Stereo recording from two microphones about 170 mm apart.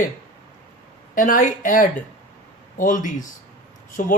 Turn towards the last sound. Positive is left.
turn(degrees=50)  # may be behind; listen again after turning